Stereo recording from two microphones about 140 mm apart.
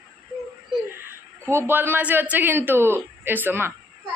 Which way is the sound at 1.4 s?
20° right (ahead or behind).